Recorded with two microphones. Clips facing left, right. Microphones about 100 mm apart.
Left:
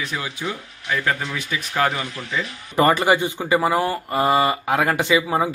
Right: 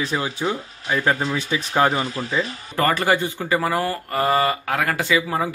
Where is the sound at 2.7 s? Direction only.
15° left (ahead or behind).